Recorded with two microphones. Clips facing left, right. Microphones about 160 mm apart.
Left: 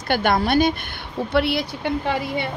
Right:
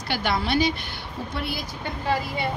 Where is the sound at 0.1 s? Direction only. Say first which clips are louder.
Left 6 dB; 50° left (ahead or behind).